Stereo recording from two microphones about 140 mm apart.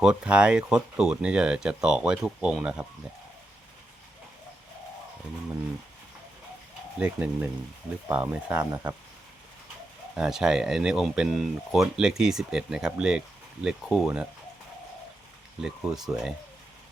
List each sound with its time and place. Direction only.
0.0 s speech: 5° right (ahead or behind)
7.0 s speech: 10° right (ahead or behind)
8.7 s speech: 20° right (ahead or behind)
10.2 s speech: 5° right (ahead or behind)
15.6 s speech: 5° right (ahead or behind)